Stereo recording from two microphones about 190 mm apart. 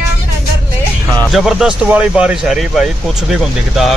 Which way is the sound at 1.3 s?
Centre (ahead or behind).